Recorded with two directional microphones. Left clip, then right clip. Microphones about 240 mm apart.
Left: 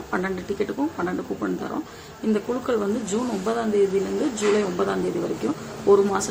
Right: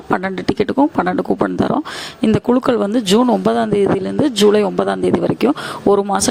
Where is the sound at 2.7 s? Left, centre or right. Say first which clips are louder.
Right 9 dB; right.